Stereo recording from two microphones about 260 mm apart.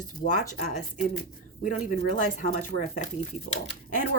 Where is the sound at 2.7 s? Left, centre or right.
Right.